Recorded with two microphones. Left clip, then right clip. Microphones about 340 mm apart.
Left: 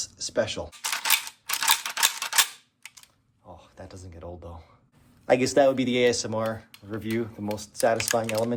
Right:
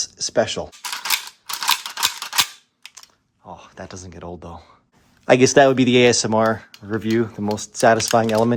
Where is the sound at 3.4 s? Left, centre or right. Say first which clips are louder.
Right 9 dB; right.